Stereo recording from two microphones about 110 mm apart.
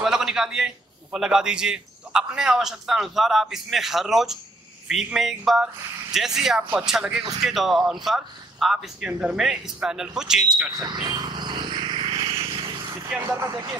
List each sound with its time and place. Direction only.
0.0 s a man's voice: 5° right (ahead or behind)
10.7 s vehicle: 40° right (ahead or behind)